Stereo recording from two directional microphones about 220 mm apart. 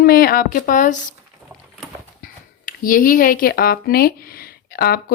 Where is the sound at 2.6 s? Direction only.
40° left (ahead or behind).